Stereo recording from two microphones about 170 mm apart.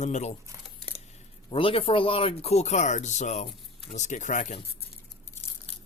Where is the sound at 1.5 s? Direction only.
30° left (ahead or behind); by 4.5 s 45° left (ahead or behind).